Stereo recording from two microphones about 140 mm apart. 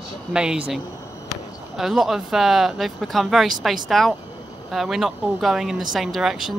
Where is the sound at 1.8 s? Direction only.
Centre (ahead or behind).